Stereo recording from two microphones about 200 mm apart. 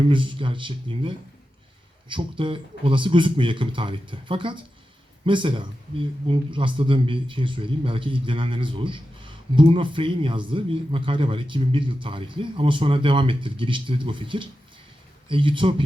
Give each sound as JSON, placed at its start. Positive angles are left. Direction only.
{"t": 0.0, "sound": "speech", "side_deg": -25}